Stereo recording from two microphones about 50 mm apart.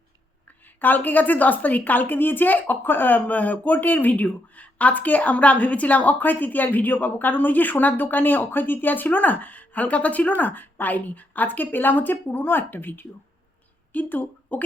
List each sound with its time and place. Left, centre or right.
0.4 s a woman's voice: left